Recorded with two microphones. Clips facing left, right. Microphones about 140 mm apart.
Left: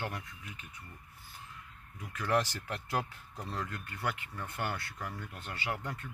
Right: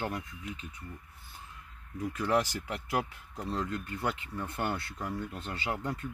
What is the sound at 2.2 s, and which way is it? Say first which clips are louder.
Speech: right 1 dB; 15° right (ahead or behind).